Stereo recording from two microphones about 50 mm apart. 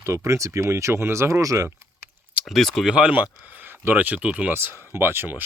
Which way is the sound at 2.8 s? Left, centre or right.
Right.